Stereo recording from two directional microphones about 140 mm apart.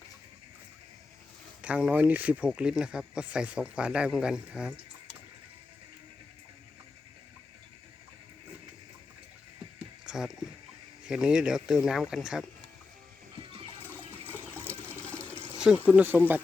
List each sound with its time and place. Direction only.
1.6 s speech: 10° right (ahead or behind)
9.7 s a sound: 5° right (ahead or behind)
11.1 s speech: 5° right (ahead or behind)
13.4 s water: 40° right (ahead or behind)
14.3 s water: 15° left (ahead or behind)
14.7 s water: 15° right (ahead or behind)
15.5 s a sound: 5° right (ahead or behind)
16.0 s speech: 10° right (ahead or behind)